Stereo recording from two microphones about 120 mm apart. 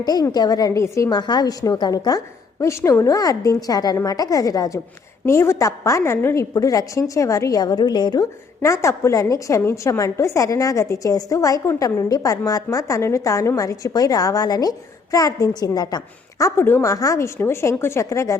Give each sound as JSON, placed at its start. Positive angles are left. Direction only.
{"t": 0.0, "sound": "a woman's voice", "side_deg": 35}
{"t": 16.6, "sound": "a woman's voice", "side_deg": 20}